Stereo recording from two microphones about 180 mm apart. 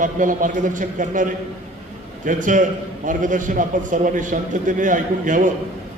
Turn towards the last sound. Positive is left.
turn(degrees=-45)  # may be behind; listen again after turning